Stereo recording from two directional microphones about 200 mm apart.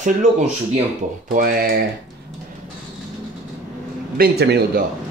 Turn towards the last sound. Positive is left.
turn(degrees=-55)  # may be behind; listen again after turning